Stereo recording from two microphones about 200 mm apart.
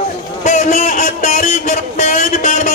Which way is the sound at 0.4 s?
35° left (ahead or behind).